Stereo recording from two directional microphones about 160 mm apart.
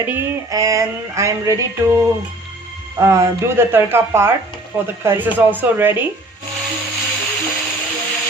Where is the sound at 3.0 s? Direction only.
15° right (ahead or behind).